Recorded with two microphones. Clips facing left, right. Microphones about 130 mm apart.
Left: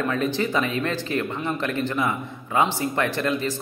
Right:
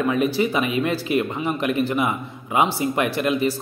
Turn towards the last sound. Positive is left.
turn(degrees=-10)  # may be behind; listen again after turning